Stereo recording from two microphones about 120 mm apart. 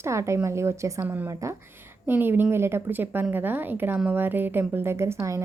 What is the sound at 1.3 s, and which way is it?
A woman's voice, 25° right (ahead or behind).